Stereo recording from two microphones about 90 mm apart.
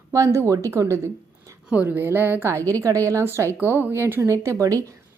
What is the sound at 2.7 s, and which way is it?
A woman's voice, 35° right (ahead or behind).